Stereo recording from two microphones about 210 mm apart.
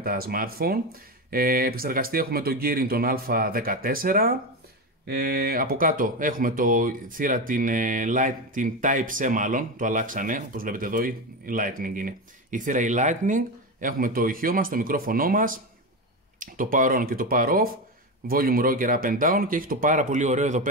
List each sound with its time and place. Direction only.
0.0 s speech: 45° right (ahead or behind)